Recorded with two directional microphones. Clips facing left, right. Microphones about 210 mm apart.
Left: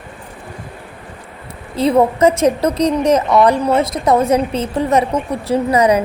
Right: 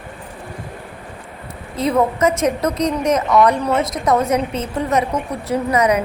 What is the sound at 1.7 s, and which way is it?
A woman's voice, 30° left (ahead or behind).